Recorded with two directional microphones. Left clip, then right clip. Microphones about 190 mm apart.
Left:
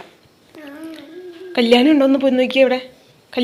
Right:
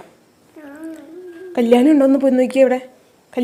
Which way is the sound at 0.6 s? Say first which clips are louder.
Even; 10° right (ahead or behind).